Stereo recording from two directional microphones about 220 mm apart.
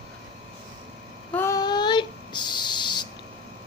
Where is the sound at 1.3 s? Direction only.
10° left (ahead or behind).